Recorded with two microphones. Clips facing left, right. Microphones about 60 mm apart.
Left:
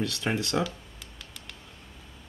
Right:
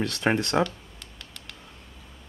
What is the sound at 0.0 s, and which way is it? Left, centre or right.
Speech, right.